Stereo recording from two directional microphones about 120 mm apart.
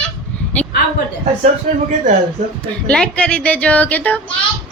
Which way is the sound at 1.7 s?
90° right.